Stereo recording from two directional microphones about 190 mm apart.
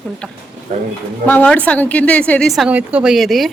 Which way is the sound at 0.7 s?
40° right (ahead or behind).